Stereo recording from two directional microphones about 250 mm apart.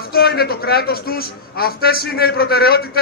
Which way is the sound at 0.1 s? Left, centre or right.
Left.